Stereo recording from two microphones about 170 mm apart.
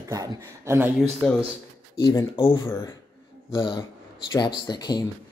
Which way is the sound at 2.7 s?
15° left (ahead or behind).